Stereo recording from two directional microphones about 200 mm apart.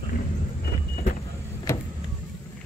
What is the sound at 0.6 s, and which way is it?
Vehicle, 45° left (ahead or behind).